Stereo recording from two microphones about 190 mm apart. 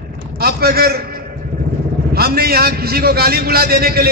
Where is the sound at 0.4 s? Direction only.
55° right (ahead or behind).